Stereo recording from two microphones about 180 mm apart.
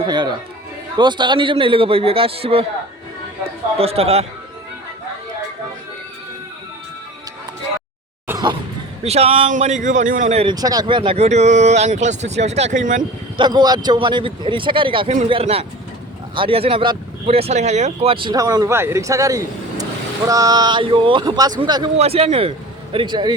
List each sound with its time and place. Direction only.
0.0 s speech: 25° right (ahead or behind)
3.8 s speech: 35° right (ahead or behind)
8.3 s a sound: 20° right (ahead or behind)
9.0 s speech: 35° right (ahead or behind)
10.4 s speech: 20° right (ahead or behind); by 13.0 s 45° right (ahead or behind)
13.0 s speech: 25° right (ahead or behind)
21.9 s speech: 35° right (ahead or behind)